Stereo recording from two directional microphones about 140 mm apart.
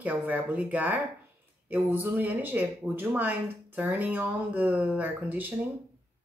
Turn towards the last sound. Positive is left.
turn(degrees=-10)  # may be behind; listen again after turning